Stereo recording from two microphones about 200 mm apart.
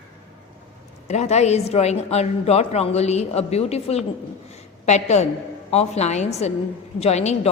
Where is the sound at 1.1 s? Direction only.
35° left (ahead or behind).